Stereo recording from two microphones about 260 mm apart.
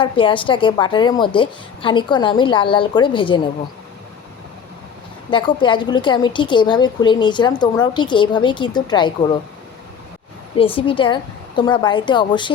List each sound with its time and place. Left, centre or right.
0.0 s a woman's voice: centre
5.3 s a woman's voice: centre
10.6 s a woman's voice: left